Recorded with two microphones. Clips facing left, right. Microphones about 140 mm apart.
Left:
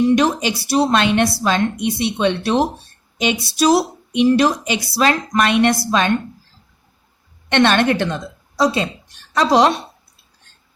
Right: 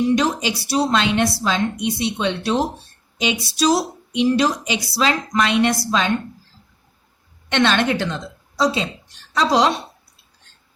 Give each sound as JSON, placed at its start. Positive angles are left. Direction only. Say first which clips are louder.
{"t": 0.2, "sound": "speech", "louder": "left 3 dB", "side_deg": 55}
{"t": 7.5, "sound": "a woman's voice", "louder": "left 3 dB", "side_deg": 55}